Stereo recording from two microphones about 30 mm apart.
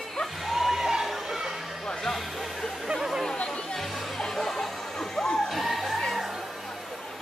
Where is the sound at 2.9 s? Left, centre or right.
Centre.